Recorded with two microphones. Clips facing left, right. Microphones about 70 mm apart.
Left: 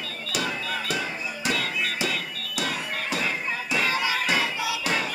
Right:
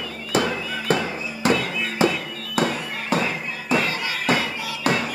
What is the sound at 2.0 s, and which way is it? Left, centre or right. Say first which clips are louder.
Music: right 8 dB; right.